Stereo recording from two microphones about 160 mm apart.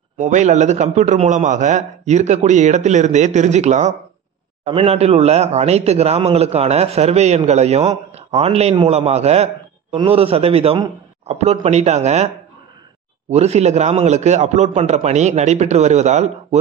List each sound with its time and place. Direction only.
0.2 s a man's voice: 50° right (ahead or behind)
13.3 s a man's voice: 45° right (ahead or behind)